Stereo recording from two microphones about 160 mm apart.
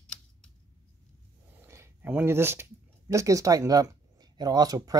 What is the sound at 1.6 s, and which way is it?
Speech, 15° right (ahead or behind).